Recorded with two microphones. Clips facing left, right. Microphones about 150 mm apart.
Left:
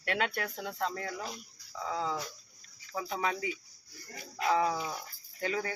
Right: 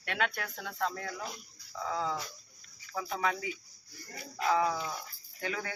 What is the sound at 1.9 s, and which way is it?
Speech, 30° left (ahead or behind).